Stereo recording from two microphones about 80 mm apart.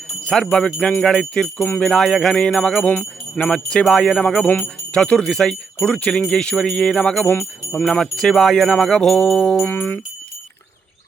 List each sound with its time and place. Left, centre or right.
0.3 s speech: centre
2.9 s speech: centre
7.7 s jingle bell: centre
9.6 s jingle bell: left